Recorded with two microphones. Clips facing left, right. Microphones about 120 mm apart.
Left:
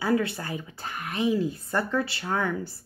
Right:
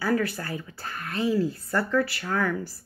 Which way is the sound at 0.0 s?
25° left (ahead or behind).